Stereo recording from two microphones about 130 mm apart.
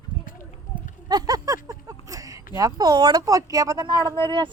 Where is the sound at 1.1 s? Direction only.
30° right (ahead or behind).